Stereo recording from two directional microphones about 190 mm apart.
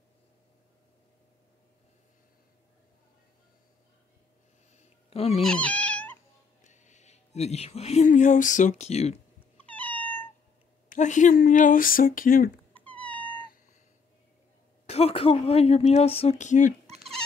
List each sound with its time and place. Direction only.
4.7 s a sound: 35° left (ahead or behind)
5.4 s cat: 5° left (ahead or behind)
6.6 s speech: 40° left (ahead or behind)
9.6 s cat: 10° left (ahead or behind)
10.9 s speech: 40° left (ahead or behind)
12.7 s cat: 5° left (ahead or behind)
14.9 s speech: 30° left (ahead or behind)
16.8 s insect: 35° right (ahead or behind)